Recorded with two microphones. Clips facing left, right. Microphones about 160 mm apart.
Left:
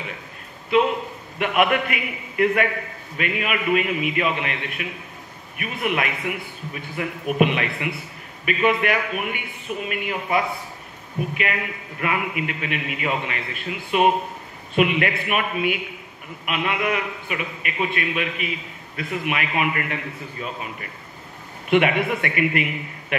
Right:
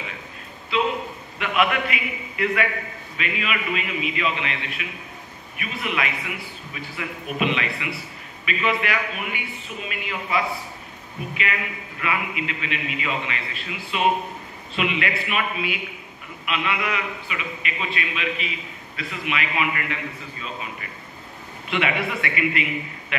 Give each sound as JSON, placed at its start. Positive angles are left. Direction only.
{"t": 1.4, "sound": "a man's voice", "side_deg": 50}
{"t": 21.6, "sound": "a man's voice", "side_deg": 50}